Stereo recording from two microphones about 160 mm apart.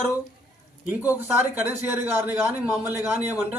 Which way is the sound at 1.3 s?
10° right (ahead or behind).